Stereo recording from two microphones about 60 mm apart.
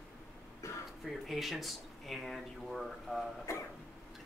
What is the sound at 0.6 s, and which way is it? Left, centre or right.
Throat clearing, left.